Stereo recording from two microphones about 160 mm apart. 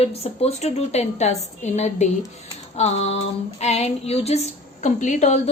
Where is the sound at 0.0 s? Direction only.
40° left (ahead or behind).